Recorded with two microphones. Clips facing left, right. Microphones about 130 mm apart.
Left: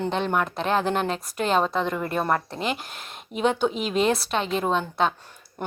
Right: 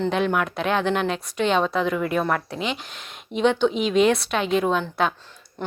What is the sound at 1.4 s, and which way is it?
Speech, centre (ahead or behind).